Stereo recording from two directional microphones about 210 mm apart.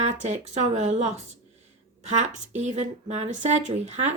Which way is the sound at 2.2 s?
35° right (ahead or behind).